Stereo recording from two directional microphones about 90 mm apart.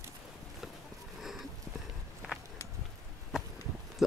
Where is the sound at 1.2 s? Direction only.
Centre (ahead or behind).